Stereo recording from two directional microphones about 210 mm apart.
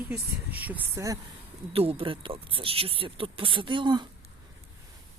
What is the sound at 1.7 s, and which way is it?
Speech, 25° right (ahead or behind).